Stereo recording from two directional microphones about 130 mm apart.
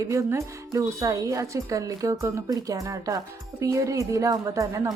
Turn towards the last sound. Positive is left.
turn(degrees=-25)  # may be behind; listen again after turning